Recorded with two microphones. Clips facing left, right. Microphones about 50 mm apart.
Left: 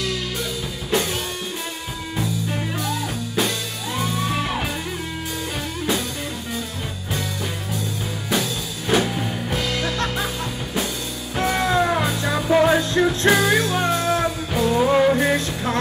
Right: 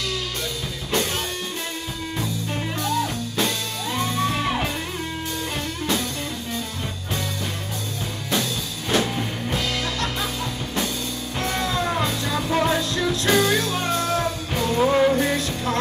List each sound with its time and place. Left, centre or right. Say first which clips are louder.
2.1 s music: left 3 dB; centre
8.3 s music: left 1 dB; centre
11.4 s music: left 5 dB; left
12.9 s music: left 5 dB; left
13.3 s music: right 1 dB; centre
15.3 s music: left 2 dB; left